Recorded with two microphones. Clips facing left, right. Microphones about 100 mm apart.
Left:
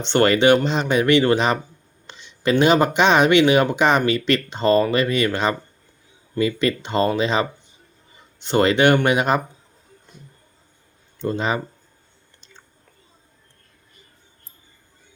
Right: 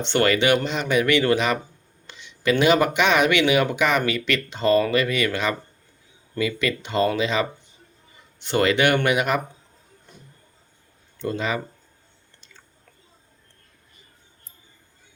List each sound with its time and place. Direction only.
0.0 s speech: 30° left (ahead or behind)
11.2 s speech: 30° left (ahead or behind)